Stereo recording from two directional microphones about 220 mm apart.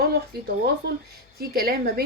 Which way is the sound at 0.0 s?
45° right (ahead or behind).